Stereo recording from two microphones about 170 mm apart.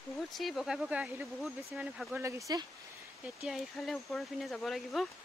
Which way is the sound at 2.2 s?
20° right (ahead or behind).